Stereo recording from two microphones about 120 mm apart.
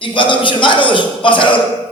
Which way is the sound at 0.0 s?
45° left (ahead or behind).